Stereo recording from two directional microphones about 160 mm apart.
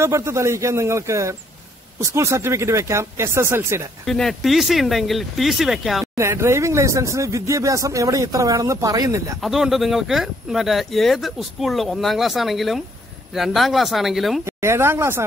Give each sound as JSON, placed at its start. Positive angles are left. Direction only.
{"t": 0.0, "sound": "speech", "side_deg": -15}
{"t": 4.0, "sound": "speech", "side_deg": 0}
{"t": 6.1, "sound": "speech", "side_deg": -15}
{"t": 9.4, "sound": "speech", "side_deg": 0}
{"t": 14.4, "sound": "speech", "side_deg": -15}